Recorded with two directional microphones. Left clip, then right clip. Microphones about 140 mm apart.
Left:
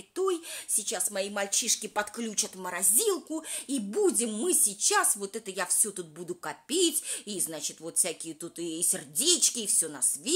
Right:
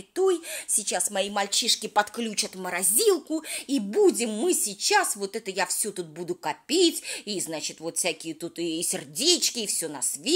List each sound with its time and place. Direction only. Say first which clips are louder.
0.1 s speech: right 6 dB; 25° right (ahead or behind)